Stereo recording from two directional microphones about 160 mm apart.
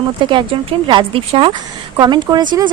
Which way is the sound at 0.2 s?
30° right (ahead or behind).